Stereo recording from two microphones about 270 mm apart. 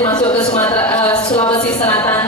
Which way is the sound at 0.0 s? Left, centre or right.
Centre.